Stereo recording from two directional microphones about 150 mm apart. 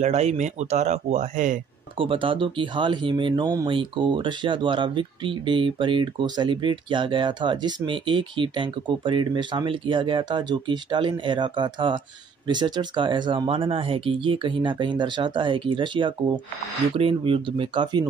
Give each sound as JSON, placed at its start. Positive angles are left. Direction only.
{"t": 0.0, "sound": "speech", "side_deg": -50}
{"t": 2.0, "sound": "speech", "side_deg": -35}